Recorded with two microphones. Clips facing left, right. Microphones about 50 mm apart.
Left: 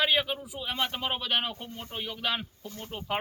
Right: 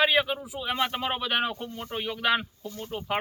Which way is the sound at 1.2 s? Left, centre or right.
Right.